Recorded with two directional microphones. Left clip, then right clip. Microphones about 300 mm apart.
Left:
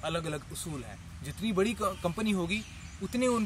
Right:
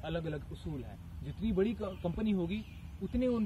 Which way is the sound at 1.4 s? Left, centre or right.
Centre.